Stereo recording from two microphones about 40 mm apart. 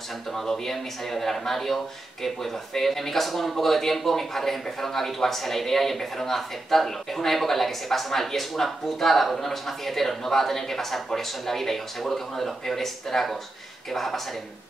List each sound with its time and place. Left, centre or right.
0.3 s speech: centre